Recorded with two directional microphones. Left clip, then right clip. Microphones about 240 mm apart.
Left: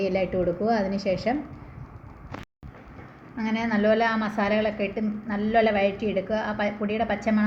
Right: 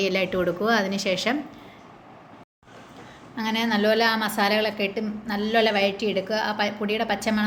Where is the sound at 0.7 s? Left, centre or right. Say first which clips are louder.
Right 2 dB; right.